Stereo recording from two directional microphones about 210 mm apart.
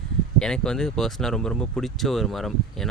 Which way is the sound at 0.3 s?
5° left (ahead or behind).